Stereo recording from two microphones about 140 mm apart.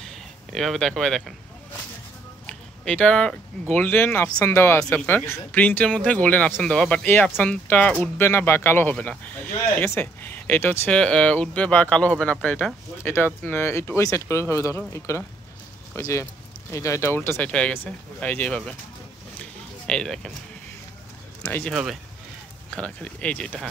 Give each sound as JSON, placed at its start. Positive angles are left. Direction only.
{"t": 0.0, "sound": "a sound", "side_deg": 0}
{"t": 2.4, "sound": "speech", "side_deg": 5}
{"t": 19.9, "sound": "speech", "side_deg": 5}
{"t": 21.6, "sound": "speech", "side_deg": -5}
{"t": 22.8, "sound": "speech", "side_deg": 10}